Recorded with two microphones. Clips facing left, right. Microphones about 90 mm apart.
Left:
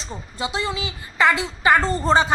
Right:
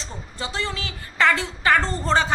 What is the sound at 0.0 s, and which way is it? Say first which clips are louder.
A woman's voice: left 4 dB; 15° left (ahead or behind).